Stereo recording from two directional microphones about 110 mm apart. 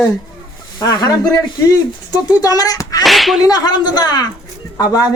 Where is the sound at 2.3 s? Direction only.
35° left (ahead or behind).